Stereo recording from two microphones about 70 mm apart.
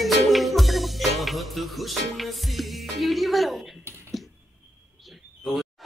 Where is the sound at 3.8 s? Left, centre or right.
Right.